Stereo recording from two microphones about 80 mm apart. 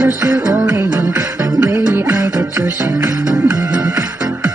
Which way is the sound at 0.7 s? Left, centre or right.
Right.